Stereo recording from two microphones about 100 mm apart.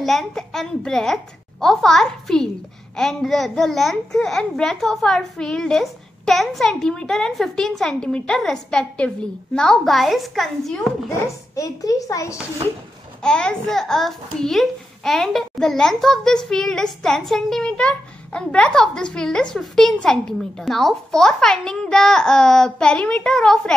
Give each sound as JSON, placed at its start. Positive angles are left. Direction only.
{"t": 0.0, "sound": "a child's voice", "side_deg": 5}
{"t": 11.1, "sound": "a child's voice", "side_deg": 35}
{"t": 13.2, "sound": "a child's voice", "side_deg": 10}